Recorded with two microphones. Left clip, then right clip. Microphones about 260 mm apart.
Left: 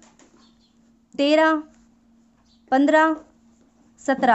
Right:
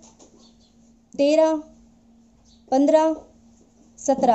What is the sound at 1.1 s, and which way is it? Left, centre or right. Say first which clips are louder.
Speech: even; left.